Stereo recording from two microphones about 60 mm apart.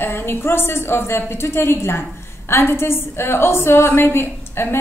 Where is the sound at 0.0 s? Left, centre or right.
Left.